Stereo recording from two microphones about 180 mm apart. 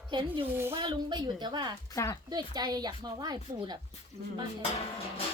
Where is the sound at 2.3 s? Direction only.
20° right (ahead or behind).